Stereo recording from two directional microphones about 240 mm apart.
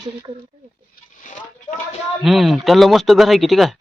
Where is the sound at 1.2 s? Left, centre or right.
Left.